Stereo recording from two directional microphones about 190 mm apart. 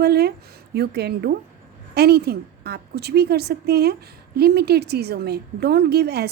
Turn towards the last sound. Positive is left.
turn(degrees=-60)  # may be behind; listen again after turning